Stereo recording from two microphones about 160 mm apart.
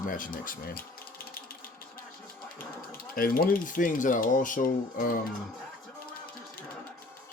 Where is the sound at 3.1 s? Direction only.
65° left (ahead or behind).